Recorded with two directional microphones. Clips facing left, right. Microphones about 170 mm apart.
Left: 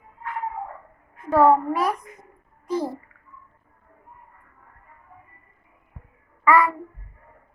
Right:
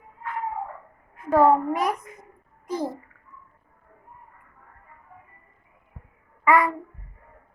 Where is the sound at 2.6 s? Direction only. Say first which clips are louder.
Left 2 dB; 20° right (ahead or behind).